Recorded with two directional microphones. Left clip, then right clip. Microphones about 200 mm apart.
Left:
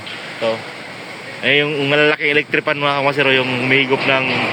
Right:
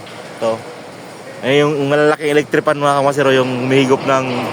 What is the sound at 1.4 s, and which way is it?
Speech, 15° right (ahead or behind).